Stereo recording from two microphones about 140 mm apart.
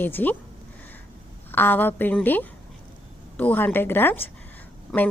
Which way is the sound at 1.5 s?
15° left (ahead or behind).